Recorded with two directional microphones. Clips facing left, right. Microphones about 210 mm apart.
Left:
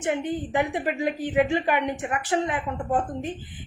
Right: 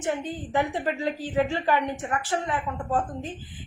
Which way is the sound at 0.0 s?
20° left (ahead or behind).